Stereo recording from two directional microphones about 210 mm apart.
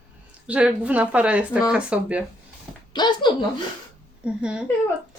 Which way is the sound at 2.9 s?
20° left (ahead or behind).